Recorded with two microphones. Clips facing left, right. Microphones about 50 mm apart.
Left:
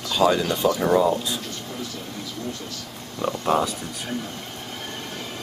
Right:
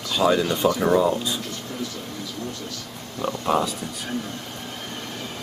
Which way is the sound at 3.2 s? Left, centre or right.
Centre.